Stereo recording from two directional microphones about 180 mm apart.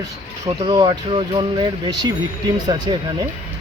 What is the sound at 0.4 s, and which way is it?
Speech, 25° right (ahead or behind).